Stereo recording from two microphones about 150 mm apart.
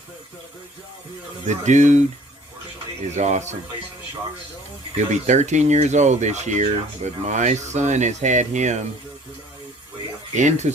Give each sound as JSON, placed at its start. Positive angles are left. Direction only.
{"t": 1.5, "sound": "speech", "side_deg": -50}
{"t": 3.2, "sound": "speech", "side_deg": -50}
{"t": 5.1, "sound": "speech", "side_deg": -50}
{"t": 10.3, "sound": "speech", "side_deg": -55}